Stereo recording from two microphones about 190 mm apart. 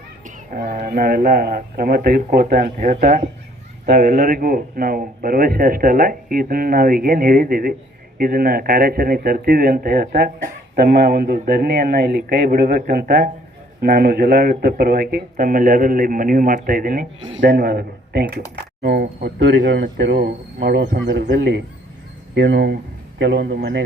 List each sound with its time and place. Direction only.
0.3 s speech: 50° right (ahead or behind)
17.2 s speech: 80° right
17.4 s speech: 50° right (ahead or behind)